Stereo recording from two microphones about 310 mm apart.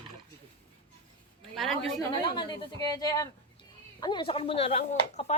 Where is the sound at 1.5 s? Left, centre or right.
Centre.